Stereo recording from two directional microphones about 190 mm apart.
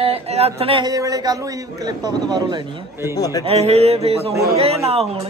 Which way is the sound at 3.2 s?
20° left (ahead or behind).